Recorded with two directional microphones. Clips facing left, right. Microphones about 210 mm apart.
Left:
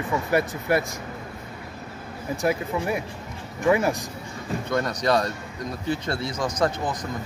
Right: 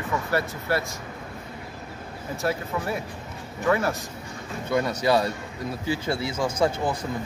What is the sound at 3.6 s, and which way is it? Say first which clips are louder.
Speech: left 3 dB; 15° left (ahead or behind).